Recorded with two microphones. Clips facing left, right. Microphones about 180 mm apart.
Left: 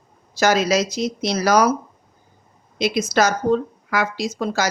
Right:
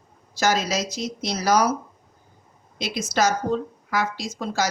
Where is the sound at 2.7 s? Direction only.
70° left (ahead or behind).